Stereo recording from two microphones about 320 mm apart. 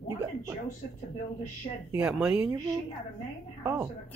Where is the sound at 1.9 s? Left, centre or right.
Centre.